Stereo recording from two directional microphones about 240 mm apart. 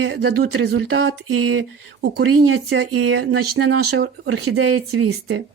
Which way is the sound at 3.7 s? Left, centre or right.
Right.